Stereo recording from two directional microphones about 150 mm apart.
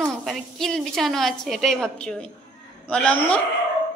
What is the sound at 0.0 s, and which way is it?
A woman's voice, centre (ahead or behind).